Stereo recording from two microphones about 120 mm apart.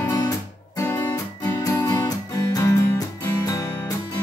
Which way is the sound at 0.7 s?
30° left (ahead or behind).